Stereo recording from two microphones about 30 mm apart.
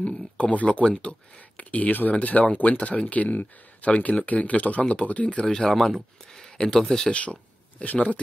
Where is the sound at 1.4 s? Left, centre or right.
Left.